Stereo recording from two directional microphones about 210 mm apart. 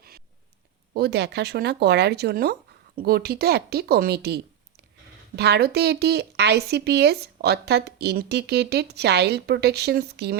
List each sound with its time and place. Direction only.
0.9 s speech: 50° right (ahead or behind)
5.4 s speech: 50° right (ahead or behind)